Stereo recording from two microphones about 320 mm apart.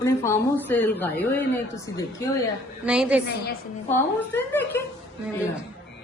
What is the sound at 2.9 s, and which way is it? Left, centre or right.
A woman's voice, centre.